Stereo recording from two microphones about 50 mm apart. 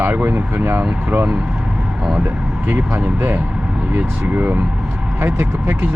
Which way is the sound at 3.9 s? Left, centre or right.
Right.